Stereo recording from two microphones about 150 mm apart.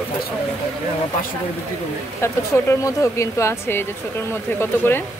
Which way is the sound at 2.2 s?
20° left (ahead or behind).